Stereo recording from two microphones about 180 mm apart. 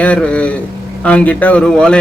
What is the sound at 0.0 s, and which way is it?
A man's voice, 5° left (ahead or behind).